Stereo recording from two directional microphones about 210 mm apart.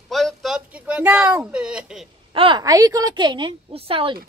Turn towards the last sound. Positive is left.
turn(degrees=-25)  # may be behind; listen again after turning